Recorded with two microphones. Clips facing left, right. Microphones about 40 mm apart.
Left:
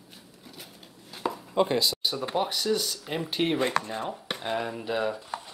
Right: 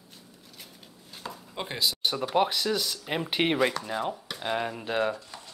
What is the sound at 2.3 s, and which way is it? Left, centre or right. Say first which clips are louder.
Speech: right 4 dB; right.